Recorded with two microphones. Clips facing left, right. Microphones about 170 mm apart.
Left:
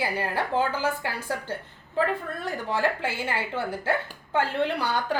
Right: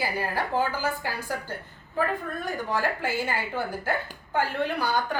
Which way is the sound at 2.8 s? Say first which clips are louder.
Left 1 dB; 25° left (ahead or behind).